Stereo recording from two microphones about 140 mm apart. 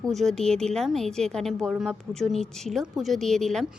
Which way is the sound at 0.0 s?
Centre (ahead or behind).